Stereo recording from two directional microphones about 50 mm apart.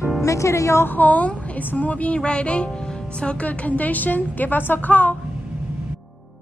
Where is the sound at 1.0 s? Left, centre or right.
Left.